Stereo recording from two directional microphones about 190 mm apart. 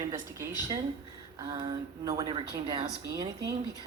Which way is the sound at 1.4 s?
25° right (ahead or behind).